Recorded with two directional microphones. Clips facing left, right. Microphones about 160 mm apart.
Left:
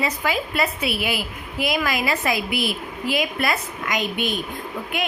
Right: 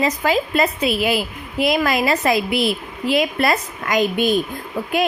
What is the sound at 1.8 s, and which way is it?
A woman's voice, 40° right (ahead or behind).